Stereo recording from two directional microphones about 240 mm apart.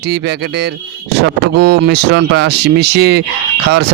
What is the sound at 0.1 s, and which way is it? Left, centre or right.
Speech, right.